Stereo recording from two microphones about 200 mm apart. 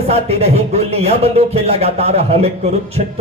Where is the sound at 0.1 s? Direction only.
30° right (ahead or behind).